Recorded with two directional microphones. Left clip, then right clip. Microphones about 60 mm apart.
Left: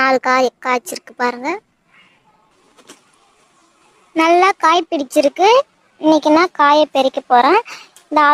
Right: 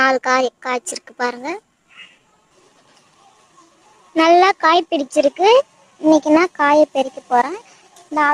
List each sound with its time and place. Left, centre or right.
0.0 s a child's voice: left
4.1 s a child's voice: left